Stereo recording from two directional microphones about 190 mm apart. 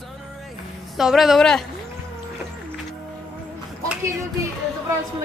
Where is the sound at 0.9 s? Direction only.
Centre (ahead or behind).